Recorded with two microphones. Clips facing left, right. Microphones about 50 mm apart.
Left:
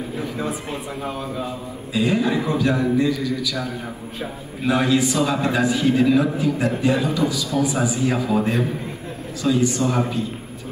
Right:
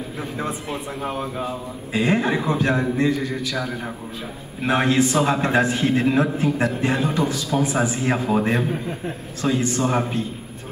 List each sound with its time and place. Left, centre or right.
1.0 s a man's voice: right